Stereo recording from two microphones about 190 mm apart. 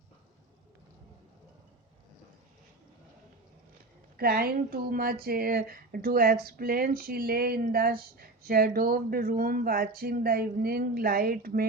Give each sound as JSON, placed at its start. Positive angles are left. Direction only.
{"t": 4.2, "sound": "speech", "side_deg": -55}